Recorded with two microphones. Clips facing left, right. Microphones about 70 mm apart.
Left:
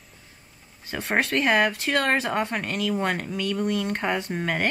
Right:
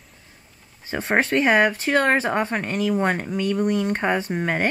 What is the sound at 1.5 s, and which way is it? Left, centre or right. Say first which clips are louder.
Speech: right 3 dB; centre.